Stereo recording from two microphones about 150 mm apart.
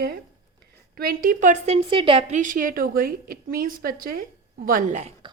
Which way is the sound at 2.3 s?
60° right (ahead or behind).